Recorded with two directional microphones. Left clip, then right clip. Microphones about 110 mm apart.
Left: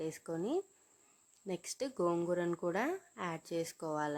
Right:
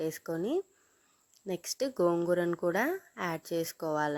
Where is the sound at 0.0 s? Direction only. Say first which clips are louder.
Right 5 dB; 25° right (ahead or behind).